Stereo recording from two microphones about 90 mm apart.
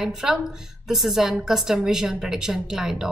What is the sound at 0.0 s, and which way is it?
A woman's voice, 5° right (ahead or behind).